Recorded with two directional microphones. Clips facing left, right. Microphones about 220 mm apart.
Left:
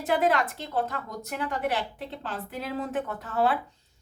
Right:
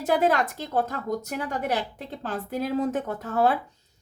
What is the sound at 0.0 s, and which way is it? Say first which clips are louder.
A woman's voice: right 2 dB; 45° right (ahead or behind).